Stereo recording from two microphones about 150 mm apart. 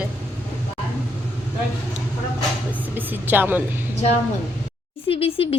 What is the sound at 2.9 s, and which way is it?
Speech, 10° right (ahead or behind).